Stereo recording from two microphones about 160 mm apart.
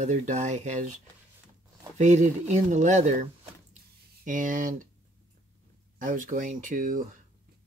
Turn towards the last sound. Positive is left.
turn(degrees=-55)  # may be behind; listen again after turning